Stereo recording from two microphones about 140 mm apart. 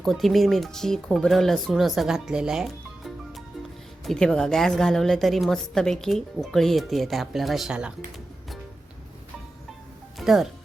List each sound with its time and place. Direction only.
0.0 s a woman's voice: centre (ahead or behind)
10.2 s speech: centre (ahead or behind)